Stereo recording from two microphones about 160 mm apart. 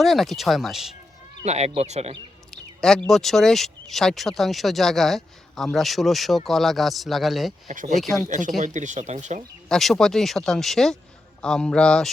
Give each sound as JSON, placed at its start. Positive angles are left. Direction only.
{"t": 0.0, "sound": "speech", "side_deg": 0}
{"t": 1.5, "sound": "speech", "side_deg": -40}
{"t": 2.5, "sound": "a sound", "side_deg": 5}
{"t": 3.1, "sound": "speech", "side_deg": 0}
{"t": 7.7, "sound": "speech", "side_deg": -55}
{"t": 7.9, "sound": "speech", "side_deg": 0}
{"t": 8.3, "sound": "speech", "side_deg": -55}
{"t": 9.6, "sound": "speech", "side_deg": 0}